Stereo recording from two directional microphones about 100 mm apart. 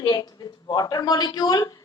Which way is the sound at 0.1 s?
40° left (ahead or behind).